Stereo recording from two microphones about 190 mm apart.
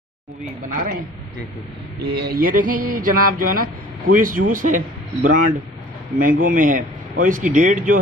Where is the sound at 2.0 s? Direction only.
55° right (ahead or behind).